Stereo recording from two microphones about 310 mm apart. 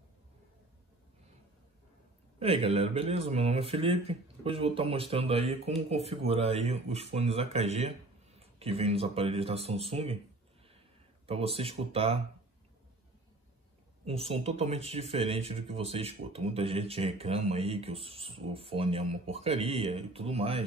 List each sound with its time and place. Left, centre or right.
2.3 s speech: centre
11.2 s speech: centre
14.0 s speech: centre